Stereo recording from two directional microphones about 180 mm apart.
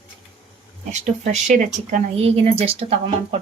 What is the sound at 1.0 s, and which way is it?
Speech, 45° right (ahead or behind).